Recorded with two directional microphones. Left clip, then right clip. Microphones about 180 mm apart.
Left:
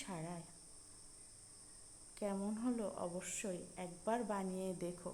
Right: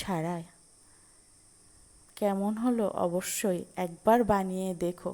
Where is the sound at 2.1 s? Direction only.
35° right (ahead or behind).